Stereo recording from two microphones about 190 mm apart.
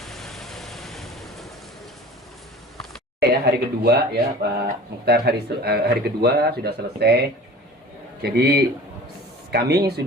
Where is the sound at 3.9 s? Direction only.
55° right (ahead or behind).